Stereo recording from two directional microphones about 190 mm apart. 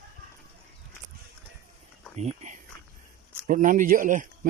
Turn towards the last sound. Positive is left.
turn(degrees=-45)  # may be behind; listen again after turning